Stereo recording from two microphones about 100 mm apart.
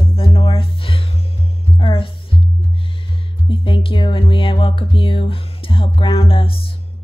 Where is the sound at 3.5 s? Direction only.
60° left (ahead or behind).